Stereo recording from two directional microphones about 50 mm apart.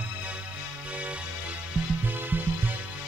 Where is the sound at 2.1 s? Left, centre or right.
Right.